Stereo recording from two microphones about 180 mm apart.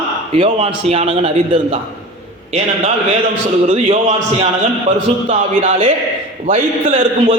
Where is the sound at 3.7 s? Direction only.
45° right (ahead or behind).